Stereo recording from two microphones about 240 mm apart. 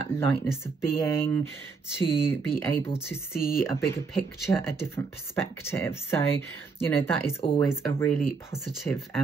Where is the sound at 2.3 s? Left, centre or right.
Centre.